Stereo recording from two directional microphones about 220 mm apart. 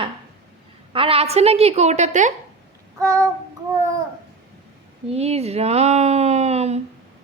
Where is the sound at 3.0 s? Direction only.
15° right (ahead or behind).